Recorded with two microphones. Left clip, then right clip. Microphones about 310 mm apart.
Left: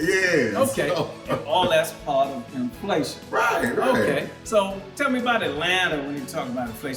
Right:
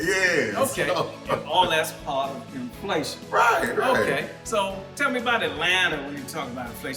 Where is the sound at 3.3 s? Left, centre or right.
Centre.